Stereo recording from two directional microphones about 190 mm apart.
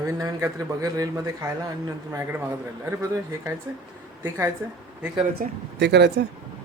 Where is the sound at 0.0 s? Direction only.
15° right (ahead or behind).